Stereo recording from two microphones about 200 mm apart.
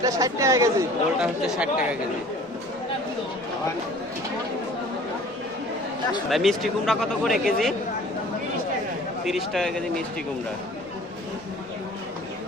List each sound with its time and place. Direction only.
0.0 s speech: 15° right (ahead or behind)
6.3 s speech: centre (ahead or behind)
9.2 s speech: centre (ahead or behind)